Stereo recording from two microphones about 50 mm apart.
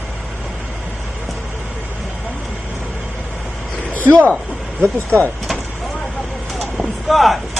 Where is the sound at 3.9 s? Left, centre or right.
Left.